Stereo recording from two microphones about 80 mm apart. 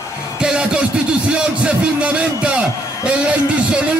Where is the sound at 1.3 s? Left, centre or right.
Centre.